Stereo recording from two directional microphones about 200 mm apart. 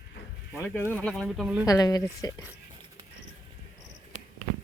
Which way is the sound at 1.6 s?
20° left (ahead or behind).